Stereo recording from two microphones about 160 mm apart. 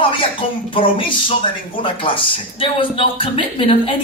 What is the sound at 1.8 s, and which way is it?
A man's voice, 35° left (ahead or behind).